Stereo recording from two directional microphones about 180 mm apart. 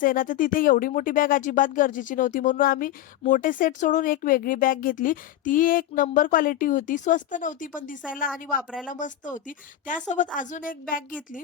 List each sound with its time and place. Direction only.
0.0 s speech: 50° left (ahead or behind)